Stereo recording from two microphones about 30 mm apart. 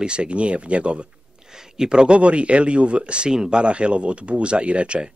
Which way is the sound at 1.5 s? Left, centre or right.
Right.